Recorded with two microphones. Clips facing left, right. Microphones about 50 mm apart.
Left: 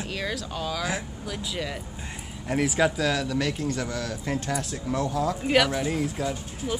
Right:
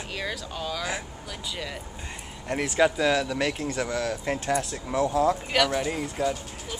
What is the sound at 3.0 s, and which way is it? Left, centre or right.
Speech, centre.